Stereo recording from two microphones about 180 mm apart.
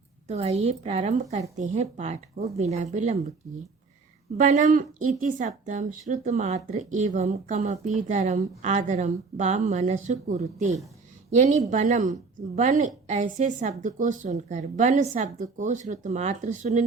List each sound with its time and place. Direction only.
0.3 s speech: 35° right (ahead or behind)
4.4 s a woman's voice: 45° right (ahead or behind)